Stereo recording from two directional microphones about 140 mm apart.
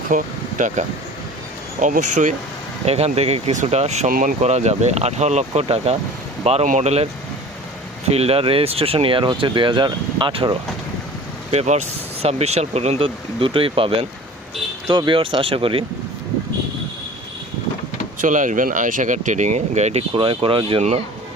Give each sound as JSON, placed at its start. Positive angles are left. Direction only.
{"t": 0.1, "sound": "speech", "side_deg": -65}
{"t": 2.8, "sound": "speech", "side_deg": -45}
{"t": 4.1, "sound": "speech", "side_deg": -90}
{"t": 4.4, "sound": "speech", "side_deg": -55}
{"t": 8.1, "sound": "speech", "side_deg": -45}
{"t": 11.5, "sound": "speech", "side_deg": -55}
{"t": 14.8, "sound": "speech", "side_deg": -30}
{"t": 18.2, "sound": "speech", "side_deg": -65}